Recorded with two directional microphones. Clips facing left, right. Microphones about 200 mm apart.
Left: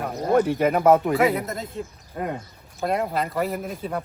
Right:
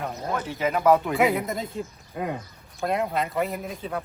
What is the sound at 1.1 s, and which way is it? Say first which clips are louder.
Speech: left 1 dB; centre (ahead or behind).